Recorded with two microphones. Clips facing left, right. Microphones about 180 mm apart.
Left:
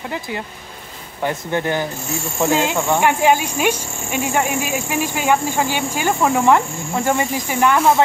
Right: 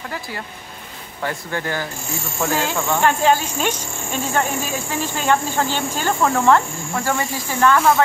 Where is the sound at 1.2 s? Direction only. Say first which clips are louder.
Left 5 dB; 20° left (ahead or behind).